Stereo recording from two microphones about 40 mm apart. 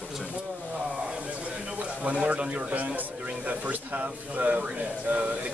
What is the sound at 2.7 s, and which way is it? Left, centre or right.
Speech, right.